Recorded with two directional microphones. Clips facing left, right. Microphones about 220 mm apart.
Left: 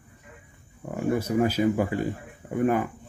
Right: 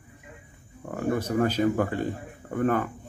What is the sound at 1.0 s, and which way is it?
A man's voice, 10° left (ahead or behind).